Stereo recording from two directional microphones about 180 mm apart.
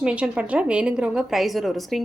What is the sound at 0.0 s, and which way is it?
A woman's voice, 5° right (ahead or behind).